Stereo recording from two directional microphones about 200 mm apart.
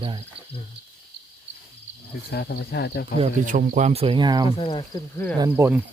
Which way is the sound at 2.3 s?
55° left (ahead or behind).